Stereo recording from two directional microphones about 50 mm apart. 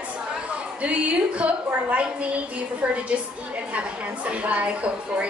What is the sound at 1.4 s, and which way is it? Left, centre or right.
Speech, right.